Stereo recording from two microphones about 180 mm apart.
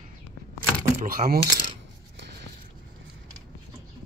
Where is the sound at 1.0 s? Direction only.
55° right (ahead or behind).